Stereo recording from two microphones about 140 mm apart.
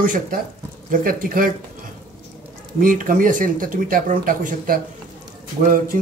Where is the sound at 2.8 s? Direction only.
75° right (ahead or behind).